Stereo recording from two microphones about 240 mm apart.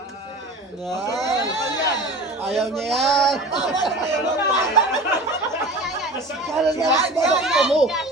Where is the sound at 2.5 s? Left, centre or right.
Centre.